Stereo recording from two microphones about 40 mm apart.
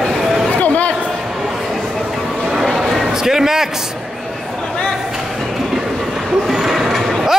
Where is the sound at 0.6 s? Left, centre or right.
Left.